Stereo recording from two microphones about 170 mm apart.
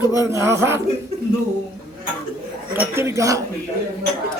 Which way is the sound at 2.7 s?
15° right (ahead or behind).